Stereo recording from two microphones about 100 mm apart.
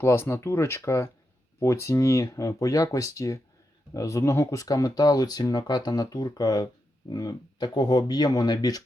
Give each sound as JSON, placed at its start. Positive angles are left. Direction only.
{"t": 0.0, "sound": "speech", "side_deg": 25}